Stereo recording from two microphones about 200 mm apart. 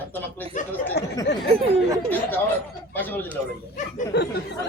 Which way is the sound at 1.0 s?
55° left (ahead or behind).